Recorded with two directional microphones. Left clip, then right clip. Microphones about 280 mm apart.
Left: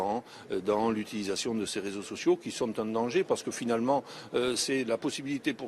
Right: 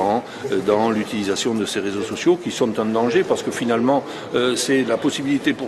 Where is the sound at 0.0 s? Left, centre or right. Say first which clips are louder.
Right 12 dB; right.